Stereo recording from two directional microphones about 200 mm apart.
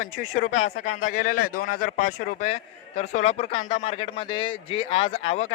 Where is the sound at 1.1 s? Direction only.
40° left (ahead or behind).